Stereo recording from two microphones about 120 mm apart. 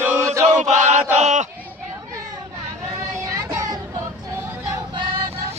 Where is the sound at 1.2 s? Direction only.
80° right.